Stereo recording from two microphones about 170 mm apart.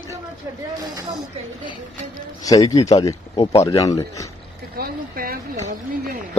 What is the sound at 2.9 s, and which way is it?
Speech, 25° left (ahead or behind).